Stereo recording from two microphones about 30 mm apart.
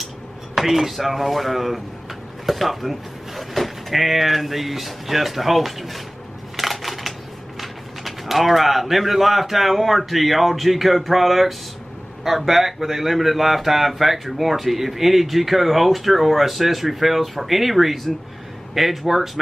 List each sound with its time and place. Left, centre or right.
0.6 s speech: centre
6.5 s crushing: centre
7.6 s speech: centre